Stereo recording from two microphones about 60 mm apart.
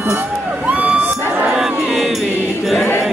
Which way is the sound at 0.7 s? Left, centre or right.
Right.